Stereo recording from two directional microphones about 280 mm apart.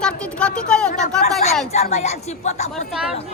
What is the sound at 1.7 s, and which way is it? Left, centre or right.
Speech, left.